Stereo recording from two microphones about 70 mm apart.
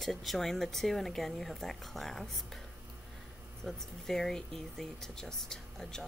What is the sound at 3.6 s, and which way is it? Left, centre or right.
Speech, centre.